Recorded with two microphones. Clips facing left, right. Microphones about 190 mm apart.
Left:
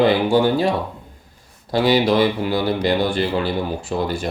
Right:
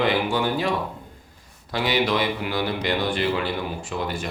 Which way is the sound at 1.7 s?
35° left (ahead or behind).